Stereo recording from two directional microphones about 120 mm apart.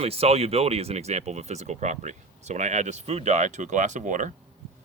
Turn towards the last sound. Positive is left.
turn(degrees=-90)